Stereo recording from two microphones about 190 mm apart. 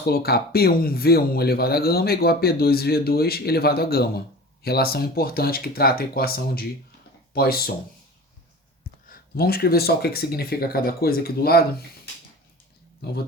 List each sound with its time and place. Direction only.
0.0 s speech: 55° left (ahead or behind)
9.0 s speech: 50° left (ahead or behind)